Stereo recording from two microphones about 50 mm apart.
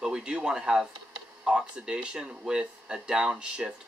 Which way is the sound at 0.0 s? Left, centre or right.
Centre.